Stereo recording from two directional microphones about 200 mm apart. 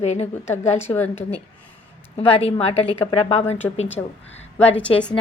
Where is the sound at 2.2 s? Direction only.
30° left (ahead or behind).